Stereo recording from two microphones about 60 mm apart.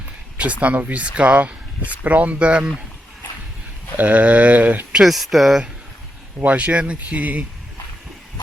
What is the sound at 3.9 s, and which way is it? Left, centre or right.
Speech, right.